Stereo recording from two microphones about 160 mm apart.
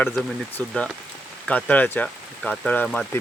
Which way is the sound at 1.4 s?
10° left (ahead or behind).